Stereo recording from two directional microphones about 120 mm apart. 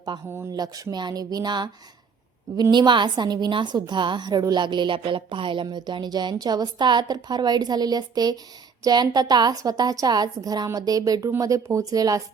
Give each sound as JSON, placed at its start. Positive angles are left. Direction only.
{"t": 0.5, "sound": "a woman's voice", "side_deg": -30}